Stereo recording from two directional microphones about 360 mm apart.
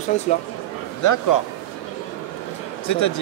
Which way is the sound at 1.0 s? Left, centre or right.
Left.